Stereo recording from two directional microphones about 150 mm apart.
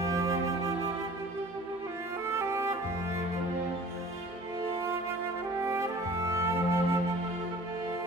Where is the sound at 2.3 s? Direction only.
20° right (ahead or behind).